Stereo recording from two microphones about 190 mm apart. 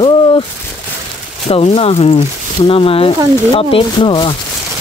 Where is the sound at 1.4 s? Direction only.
30° left (ahead or behind).